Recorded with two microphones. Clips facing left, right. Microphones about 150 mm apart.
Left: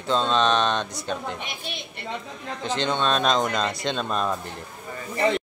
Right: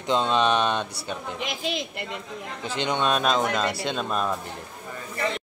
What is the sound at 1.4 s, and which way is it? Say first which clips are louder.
Speech: right 6 dB; 90° right.